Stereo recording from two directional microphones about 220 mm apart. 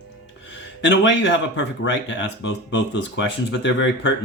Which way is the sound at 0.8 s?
55° left (ahead or behind).